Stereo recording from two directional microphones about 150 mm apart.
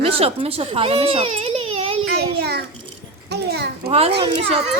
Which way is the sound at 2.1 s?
90° right.